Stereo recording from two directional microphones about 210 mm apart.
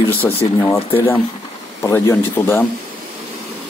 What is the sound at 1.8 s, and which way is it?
Speech, 15° left (ahead or behind).